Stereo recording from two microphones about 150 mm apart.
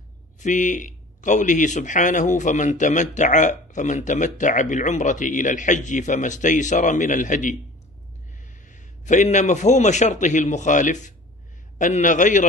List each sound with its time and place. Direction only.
0.4 s speech: 55° left (ahead or behind)
8.5 s a man's voice: 55° left (ahead or behind)